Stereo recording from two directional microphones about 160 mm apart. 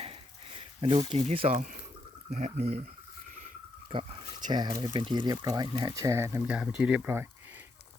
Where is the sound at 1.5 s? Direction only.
55° right (ahead or behind).